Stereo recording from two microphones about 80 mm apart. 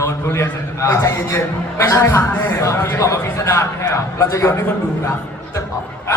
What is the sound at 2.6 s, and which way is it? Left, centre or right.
A man's voice, left.